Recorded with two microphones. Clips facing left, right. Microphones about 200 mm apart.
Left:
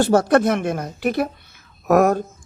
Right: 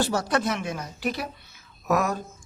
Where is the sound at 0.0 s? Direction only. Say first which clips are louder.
Left 9 dB; 55° left (ahead or behind).